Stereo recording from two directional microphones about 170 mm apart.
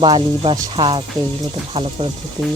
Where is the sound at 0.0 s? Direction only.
25° right (ahead or behind).